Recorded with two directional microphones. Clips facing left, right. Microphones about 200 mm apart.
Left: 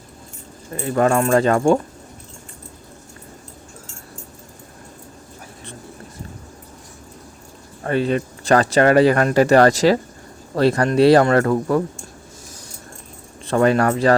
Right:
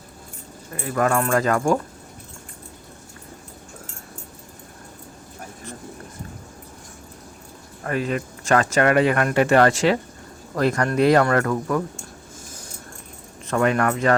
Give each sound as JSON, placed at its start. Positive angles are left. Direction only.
{"t": 0.8, "sound": "speech", "side_deg": 30}
{"t": 7.9, "sound": "speech", "side_deg": 30}
{"t": 13.5, "sound": "speech", "side_deg": 30}